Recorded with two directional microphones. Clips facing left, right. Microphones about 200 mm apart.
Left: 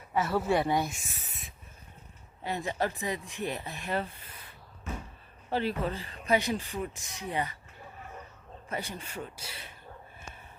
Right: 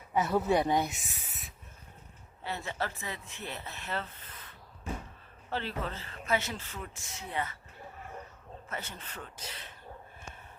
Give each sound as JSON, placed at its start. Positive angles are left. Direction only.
{"t": 0.1, "sound": "speech", "side_deg": -20}
{"t": 2.4, "sound": "speech", "side_deg": 15}
{"t": 4.9, "sound": "a sound", "side_deg": -35}
{"t": 5.5, "sound": "speech", "side_deg": 15}
{"t": 8.7, "sound": "speech", "side_deg": 15}